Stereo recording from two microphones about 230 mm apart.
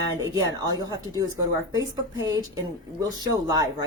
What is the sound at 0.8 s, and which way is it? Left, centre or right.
A woman's voice, centre.